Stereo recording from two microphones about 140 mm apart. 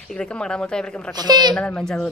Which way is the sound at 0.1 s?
5° left (ahead or behind).